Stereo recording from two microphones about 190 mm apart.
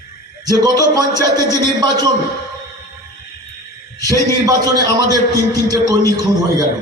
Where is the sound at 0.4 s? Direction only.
20° right (ahead or behind).